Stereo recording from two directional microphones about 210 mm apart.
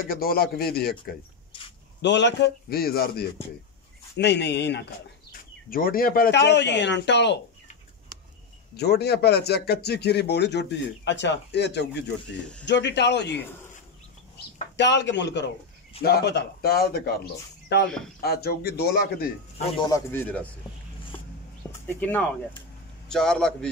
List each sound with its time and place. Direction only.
0.0 s speech: 45° left (ahead or behind)
2.0 s a man's voice: 55° left (ahead or behind)
5.7 s a man's voice: 45° left (ahead or behind)
8.7 s a man's voice: 50° left (ahead or behind)
14.8 s a man's voice: 55° left (ahead or behind)
17.8 s a man's voice: 5° left (ahead or behind)
18.2 s speech: 50° left (ahead or behind)
19.6 s speech: 20° left (ahead or behind)
21.8 s a man's voice: 10° left (ahead or behind)